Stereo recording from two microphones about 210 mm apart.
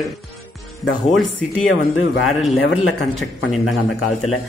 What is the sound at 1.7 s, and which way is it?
Speech, 65° left (ahead or behind).